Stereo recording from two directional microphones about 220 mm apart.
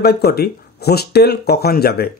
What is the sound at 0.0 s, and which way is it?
Speech, 45° left (ahead or behind).